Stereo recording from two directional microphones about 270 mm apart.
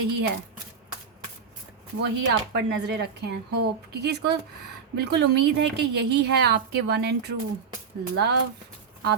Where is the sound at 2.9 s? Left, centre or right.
Right.